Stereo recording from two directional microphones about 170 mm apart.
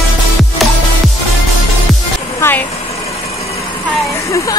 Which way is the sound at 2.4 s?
15° left (ahead or behind).